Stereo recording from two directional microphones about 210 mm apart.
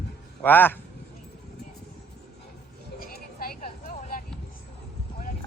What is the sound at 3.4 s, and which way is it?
Vehicle, 40° left (ahead or behind).